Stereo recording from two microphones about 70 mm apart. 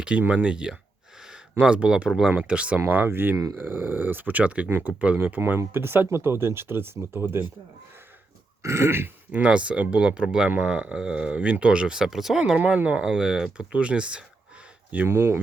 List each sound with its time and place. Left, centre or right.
0.2 s speech: centre
2.8 s speech: right
8.6 s speech: right
9.3 s speech: centre
12.5 s speech: centre
13.0 s speech: centre
15.0 s speech: right